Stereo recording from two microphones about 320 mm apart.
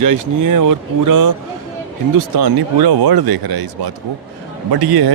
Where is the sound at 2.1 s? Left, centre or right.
Right.